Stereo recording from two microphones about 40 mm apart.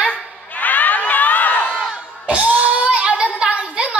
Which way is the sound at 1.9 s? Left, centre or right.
Right.